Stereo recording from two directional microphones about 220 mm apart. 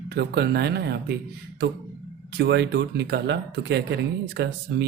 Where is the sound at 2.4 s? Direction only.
50° right (ahead or behind).